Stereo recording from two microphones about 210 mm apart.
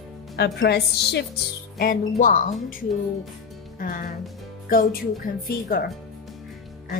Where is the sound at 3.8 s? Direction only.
45° left (ahead or behind).